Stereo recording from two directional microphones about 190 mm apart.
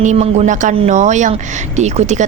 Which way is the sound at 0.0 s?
35° right (ahead or behind).